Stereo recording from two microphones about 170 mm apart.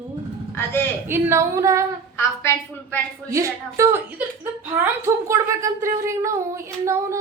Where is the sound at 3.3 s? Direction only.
20° right (ahead or behind).